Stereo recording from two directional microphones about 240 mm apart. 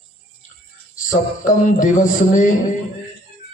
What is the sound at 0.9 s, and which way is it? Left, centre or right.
A man's voice, left.